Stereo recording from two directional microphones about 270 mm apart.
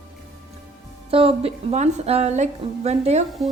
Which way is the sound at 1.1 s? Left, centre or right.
Right.